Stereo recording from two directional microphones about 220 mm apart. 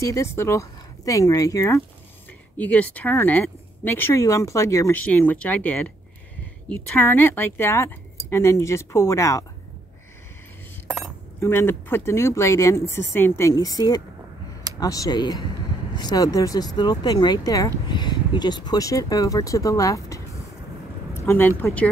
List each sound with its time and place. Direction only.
0.0 s speech: 15° left (ahead or behind)
6.9 s speech: 10° left (ahead or behind)
11.3 s speech: 10° left (ahead or behind)